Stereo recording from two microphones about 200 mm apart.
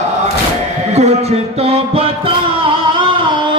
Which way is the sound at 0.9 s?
35° right (ahead or behind).